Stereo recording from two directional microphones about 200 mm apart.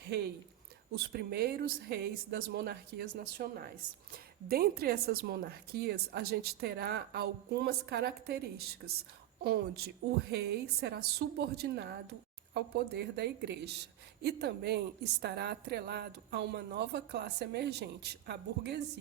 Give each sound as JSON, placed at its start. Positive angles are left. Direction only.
{"t": 1.1, "sound": "a woman's voice", "side_deg": -55}